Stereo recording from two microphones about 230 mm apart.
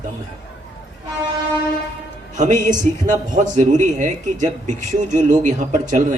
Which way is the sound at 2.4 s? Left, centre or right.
Right.